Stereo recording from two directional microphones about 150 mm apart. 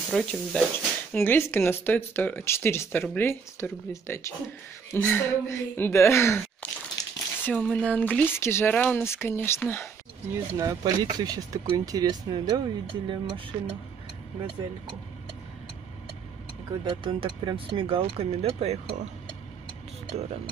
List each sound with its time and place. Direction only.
0.1 s speech: 5° left (ahead or behind)
10.3 s speech: 25° right (ahead or behind)
16.8 s speech: 35° right (ahead or behind)
20.1 s speech: 40° right (ahead or behind)